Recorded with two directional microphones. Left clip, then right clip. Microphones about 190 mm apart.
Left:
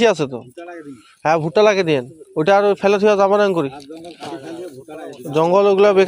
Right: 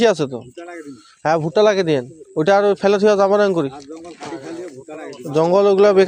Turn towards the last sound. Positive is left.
turn(degrees=-15)  # may be behind; listen again after turning